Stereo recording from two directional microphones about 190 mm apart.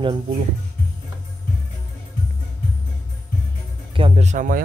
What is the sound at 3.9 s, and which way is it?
Speech, 30° right (ahead or behind).